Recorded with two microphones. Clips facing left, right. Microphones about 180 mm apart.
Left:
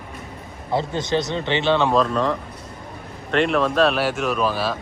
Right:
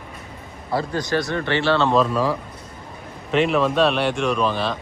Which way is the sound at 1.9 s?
5° right (ahead or behind).